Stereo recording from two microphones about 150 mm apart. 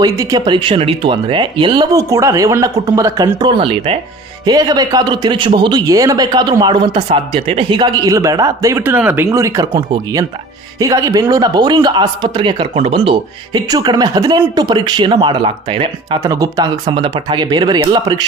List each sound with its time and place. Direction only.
0.0 s speech: 25° right (ahead or behind)
4.4 s speech: 25° right (ahead or behind)
13.7 s speech: 25° right (ahead or behind)